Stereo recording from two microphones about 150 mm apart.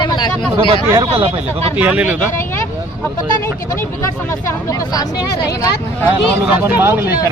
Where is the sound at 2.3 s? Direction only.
15° left (ahead or behind).